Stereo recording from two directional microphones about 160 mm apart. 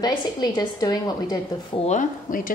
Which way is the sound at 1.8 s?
55° left (ahead or behind).